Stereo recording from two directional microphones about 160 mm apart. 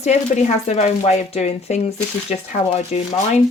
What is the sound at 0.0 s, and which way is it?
Speech, 45° left (ahead or behind).